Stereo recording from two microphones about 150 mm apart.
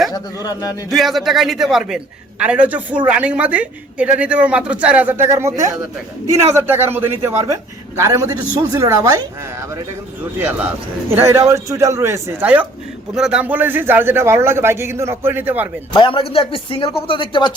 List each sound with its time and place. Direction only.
0.4 s speech: 25° left (ahead or behind)
0.9 s a man's voice: centre (ahead or behind); by 9.2 s 20° right (ahead or behind)
11.2 s a man's voice: 20° right (ahead or behind)
15.9 s a man's voice: 35° left (ahead or behind)